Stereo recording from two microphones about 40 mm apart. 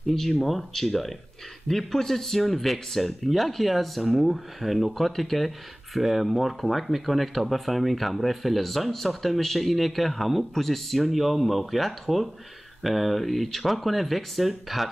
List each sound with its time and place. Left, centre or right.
0.1 s speech: centre